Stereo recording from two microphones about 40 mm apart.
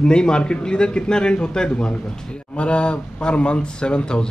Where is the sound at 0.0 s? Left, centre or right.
Left.